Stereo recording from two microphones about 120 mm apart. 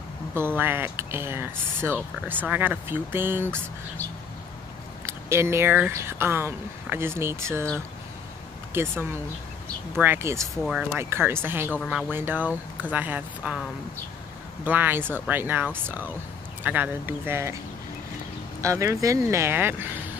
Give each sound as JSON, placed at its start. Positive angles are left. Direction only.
{"t": 0.3, "sound": "speech", "side_deg": -20}
{"t": 5.0, "sound": "a sound", "side_deg": -20}
{"t": 5.9, "sound": "speech", "side_deg": -20}
{"t": 8.8, "sound": "speech", "side_deg": -20}
{"t": 9.9, "sound": "speech", "side_deg": -20}
{"t": 10.5, "sound": "speech", "side_deg": 0}
{"t": 11.0, "sound": "speech", "side_deg": -20}
{"t": 11.8, "sound": "speech", "side_deg": 0}
{"t": 12.1, "sound": "speech", "side_deg": -15}
{"t": 18.6, "sound": "speech", "side_deg": -25}